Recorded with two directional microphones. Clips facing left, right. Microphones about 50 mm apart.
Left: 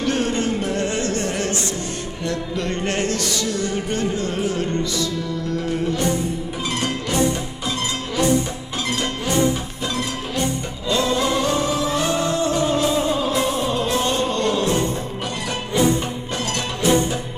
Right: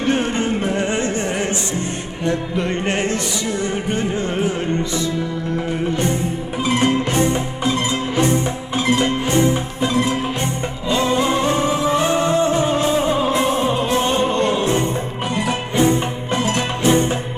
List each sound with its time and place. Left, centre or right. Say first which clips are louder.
0.0 s music: right 2 dB; right
9.8 s music: right 8 dB; right